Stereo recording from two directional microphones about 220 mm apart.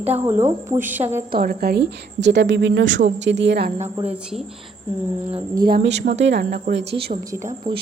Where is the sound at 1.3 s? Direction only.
45° right (ahead or behind).